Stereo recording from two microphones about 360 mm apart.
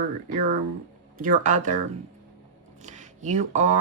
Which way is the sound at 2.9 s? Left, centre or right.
Right.